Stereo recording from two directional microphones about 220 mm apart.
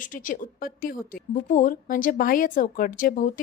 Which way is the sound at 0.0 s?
40° left (ahead or behind).